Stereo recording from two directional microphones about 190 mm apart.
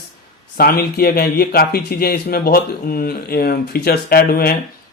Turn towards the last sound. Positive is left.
turn(degrees=55)  # may be behind; listen again after turning